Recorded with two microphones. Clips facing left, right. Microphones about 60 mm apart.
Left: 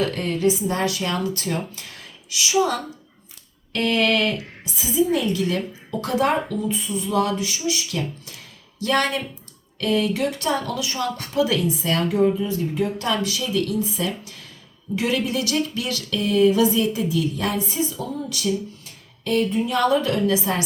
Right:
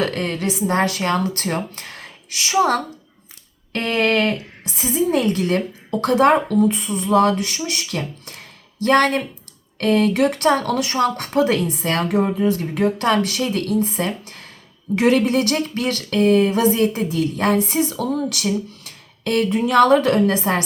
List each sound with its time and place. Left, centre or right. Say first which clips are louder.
0.0 s speech: left 1 dB; right
3.7 s speech: right 1 dB; right